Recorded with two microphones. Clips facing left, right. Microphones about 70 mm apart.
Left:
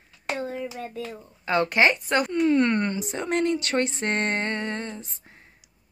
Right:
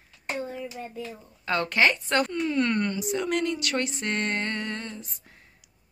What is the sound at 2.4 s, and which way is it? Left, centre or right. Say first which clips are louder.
Speech: left 4 dB; left.